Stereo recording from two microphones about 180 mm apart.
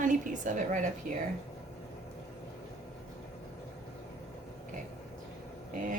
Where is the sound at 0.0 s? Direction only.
45° right (ahead or behind).